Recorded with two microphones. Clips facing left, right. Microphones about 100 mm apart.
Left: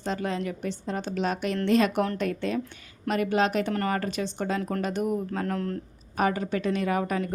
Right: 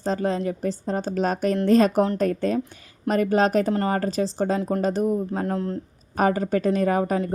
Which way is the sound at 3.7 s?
25° right (ahead or behind).